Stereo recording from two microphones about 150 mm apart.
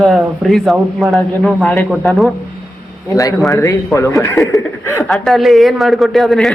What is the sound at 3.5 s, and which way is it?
Speech, 20° left (ahead or behind).